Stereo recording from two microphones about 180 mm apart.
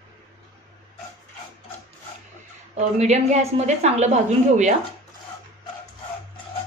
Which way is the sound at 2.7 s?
40° right (ahead or behind).